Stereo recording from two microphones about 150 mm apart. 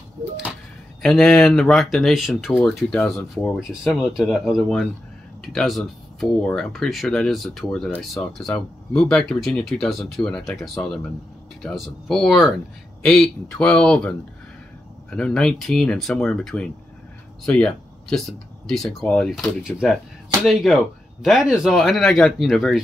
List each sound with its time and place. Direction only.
1.0 s speech: centre (ahead or behind)